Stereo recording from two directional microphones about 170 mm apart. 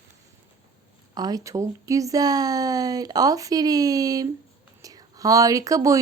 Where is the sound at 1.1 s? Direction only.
20° right (ahead or behind).